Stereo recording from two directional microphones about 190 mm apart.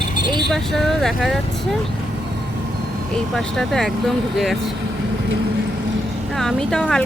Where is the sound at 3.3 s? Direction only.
Centre (ahead or behind).